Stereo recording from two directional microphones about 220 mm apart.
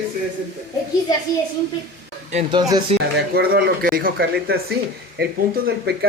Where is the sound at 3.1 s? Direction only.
45° right (ahead or behind).